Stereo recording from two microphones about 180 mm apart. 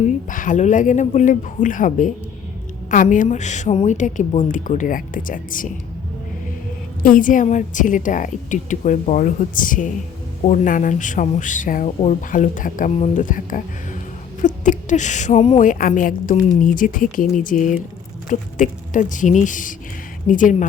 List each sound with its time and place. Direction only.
0.0 s speech: 45° left (ahead or behind)
7.0 s speech: 50° left (ahead or behind)